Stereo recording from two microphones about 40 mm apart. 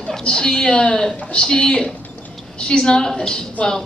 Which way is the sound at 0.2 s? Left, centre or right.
Centre.